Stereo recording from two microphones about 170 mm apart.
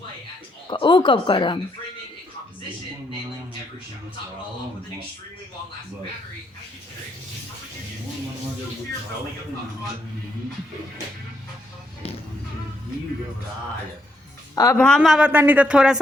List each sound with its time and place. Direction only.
0.7 s speech: 30° left (ahead or behind)
14.5 s a woman's voice: 20° left (ahead or behind)
14.8 s speech: 5° left (ahead or behind)